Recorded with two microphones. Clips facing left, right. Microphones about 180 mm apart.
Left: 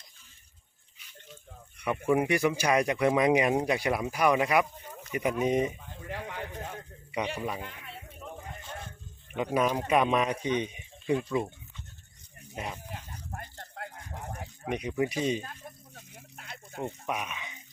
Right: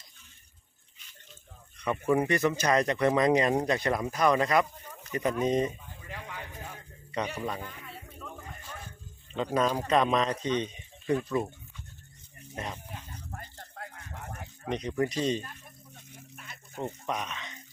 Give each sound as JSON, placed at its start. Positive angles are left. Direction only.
{"t": 1.8, "sound": "speech", "side_deg": 10}
{"t": 6.0, "sound": "a sound", "side_deg": 55}
{"t": 7.3, "sound": "speech", "side_deg": 5}
{"t": 7.6, "sound": "music", "side_deg": 20}
{"t": 9.3, "sound": "speech", "side_deg": 15}
{"t": 12.5, "sound": "speech", "side_deg": 10}
{"t": 14.7, "sound": "speech", "side_deg": 10}
{"t": 16.8, "sound": "speech", "side_deg": 10}